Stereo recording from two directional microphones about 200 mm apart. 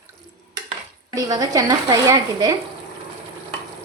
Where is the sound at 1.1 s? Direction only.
20° right (ahead or behind).